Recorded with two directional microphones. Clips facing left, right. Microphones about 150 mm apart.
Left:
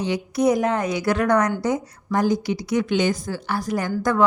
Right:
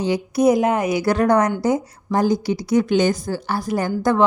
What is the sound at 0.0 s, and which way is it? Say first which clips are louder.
A woman's voice: right 3 dB; 30° right (ahead or behind).